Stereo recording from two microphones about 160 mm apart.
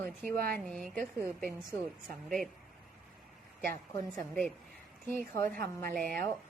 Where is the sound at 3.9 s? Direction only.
20° left (ahead or behind).